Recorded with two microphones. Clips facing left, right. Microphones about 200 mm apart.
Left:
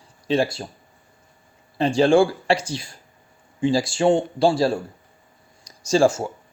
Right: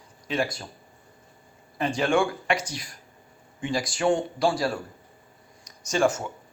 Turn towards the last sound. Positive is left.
turn(degrees=30)  # may be behind; listen again after turning